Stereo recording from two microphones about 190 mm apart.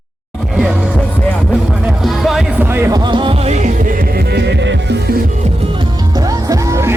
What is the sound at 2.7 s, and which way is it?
Music, 15° right (ahead or behind).